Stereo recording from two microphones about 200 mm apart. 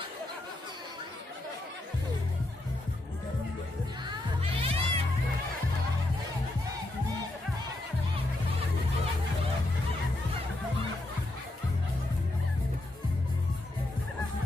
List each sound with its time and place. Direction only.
4.4 s music: 30° right (ahead or behind)